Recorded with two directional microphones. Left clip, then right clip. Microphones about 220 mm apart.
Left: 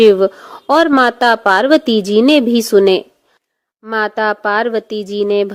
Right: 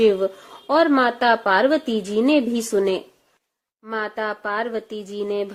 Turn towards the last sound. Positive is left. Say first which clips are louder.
# left 10 dB
turn(degrees=40)  # may be behind; listen again after turning